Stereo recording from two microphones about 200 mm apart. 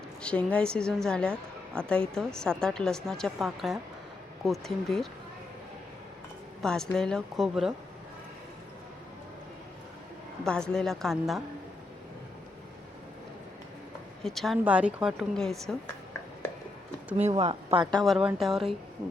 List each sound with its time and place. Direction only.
0.2 s a woman's voice: 5° left (ahead or behind)
6.6 s a woman's voice: 5° left (ahead or behind)
10.4 s a woman's voice: 5° left (ahead or behind)
14.3 s a woman's voice: centre (ahead or behind)
17.2 s speech: 30° right (ahead or behind)
17.9 s a woman's voice: centre (ahead or behind)